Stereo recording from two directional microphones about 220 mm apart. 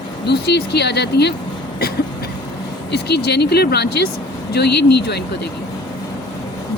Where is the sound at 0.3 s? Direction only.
50° left (ahead or behind).